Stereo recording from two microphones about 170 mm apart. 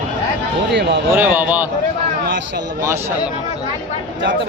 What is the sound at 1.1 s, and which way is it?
Speech, 10° right (ahead or behind).